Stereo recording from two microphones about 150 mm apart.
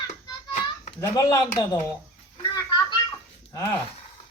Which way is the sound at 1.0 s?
25° left (ahead or behind).